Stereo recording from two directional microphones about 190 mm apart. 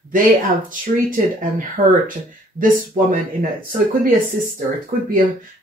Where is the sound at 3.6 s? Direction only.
50° right (ahead or behind).